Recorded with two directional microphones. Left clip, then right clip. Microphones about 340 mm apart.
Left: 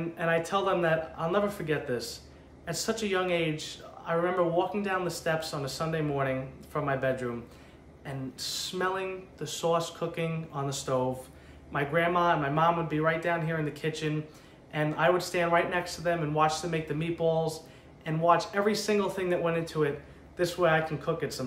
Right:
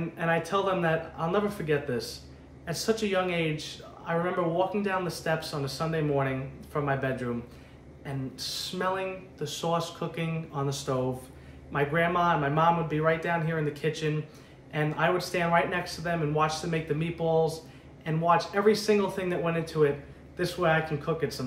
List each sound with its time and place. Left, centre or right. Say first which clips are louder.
0.2 s speech: right 1 dB; centre